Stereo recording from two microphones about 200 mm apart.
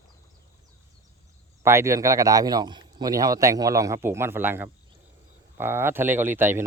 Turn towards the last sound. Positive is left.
turn(degrees=-10)  # may be behind; listen again after turning